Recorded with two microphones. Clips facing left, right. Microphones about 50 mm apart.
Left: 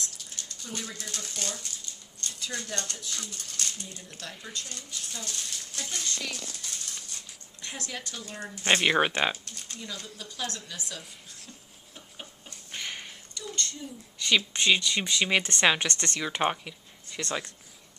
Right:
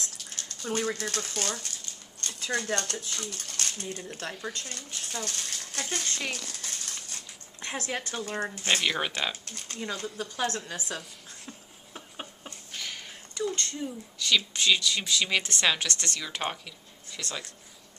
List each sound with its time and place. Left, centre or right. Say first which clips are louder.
0.0 s speech: right 1 dB; right
3.3 s speech: right 2 dB; right
5.8 s a sound: right 3 dB; right
7.6 s speech: right 5 dB; right
8.6 s speech: left 6 dB; left
9.5 s speech: right 5 dB; right
12.7 s a sound: left 2 dB; left
13.3 s a sound: right 6 dB; right
14.2 s speech: left 1 dB; left